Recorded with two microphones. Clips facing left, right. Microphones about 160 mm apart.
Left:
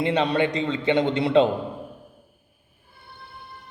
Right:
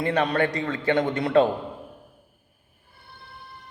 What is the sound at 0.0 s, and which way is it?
A man's voice, 20° left (ahead or behind).